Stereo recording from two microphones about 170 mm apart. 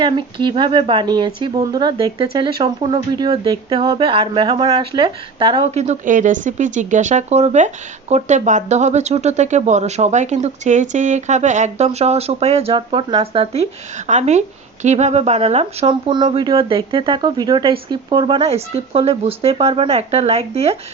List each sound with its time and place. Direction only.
0.0 s speech: 30° right (ahead or behind)
5.8 s speech: 45° right (ahead or behind)